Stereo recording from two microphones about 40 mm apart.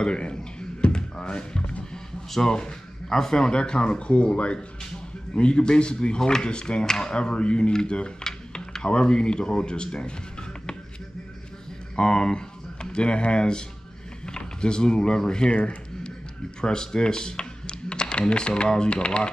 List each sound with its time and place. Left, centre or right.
0.0 s music: left
2.3 s speech: centre
12.0 s speech: centre